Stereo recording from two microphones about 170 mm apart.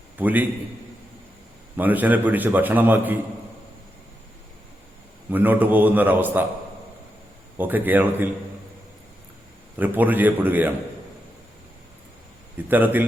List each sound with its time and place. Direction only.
0.2 s a man's voice: 10° right (ahead or behind)
1.7 s a man's voice: 10° right (ahead or behind)
5.3 s a man's voice: 10° right (ahead or behind)
7.6 s a man's voice: 10° right (ahead or behind)
9.7 s a man's voice: 10° right (ahead or behind)
12.6 s a man's voice: 10° right (ahead or behind)